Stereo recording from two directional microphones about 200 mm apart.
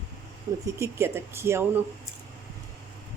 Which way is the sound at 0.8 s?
10° right (ahead or behind).